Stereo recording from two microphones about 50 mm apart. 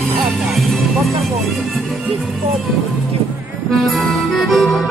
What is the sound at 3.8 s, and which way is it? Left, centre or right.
Music, centre.